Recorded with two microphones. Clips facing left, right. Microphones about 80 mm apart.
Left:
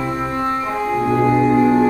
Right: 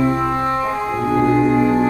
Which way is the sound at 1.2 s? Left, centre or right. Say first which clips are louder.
Left 1 dB; centre.